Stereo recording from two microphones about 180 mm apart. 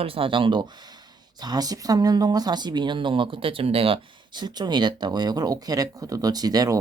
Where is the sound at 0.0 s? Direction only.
30° right (ahead or behind).